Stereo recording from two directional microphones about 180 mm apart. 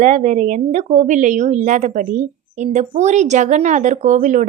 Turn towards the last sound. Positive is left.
turn(degrees=-45)  # may be behind; listen again after turning